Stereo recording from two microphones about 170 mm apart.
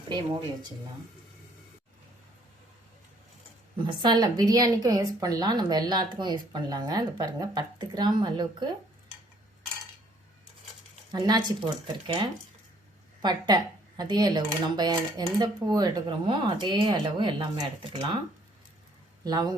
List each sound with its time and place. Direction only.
0.1 s a woman's voice: 30° right (ahead or behind)
3.8 s a woman's voice: 30° right (ahead or behind)
11.1 s a woman's voice: 25° right (ahead or behind)
19.2 s a woman's voice: 25° right (ahead or behind)